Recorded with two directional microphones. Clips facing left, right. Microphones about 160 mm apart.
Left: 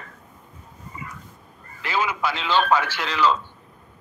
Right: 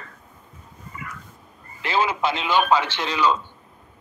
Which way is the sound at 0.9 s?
25° left (ahead or behind).